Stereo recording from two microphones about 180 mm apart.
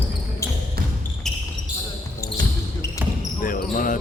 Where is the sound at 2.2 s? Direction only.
15° left (ahead or behind).